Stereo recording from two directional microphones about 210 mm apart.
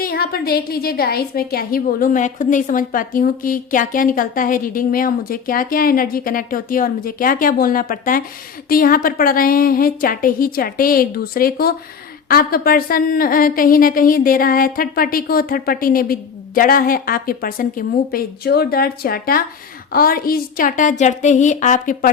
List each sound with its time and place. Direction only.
0.0 s a woman's voice: 45° left (ahead or behind)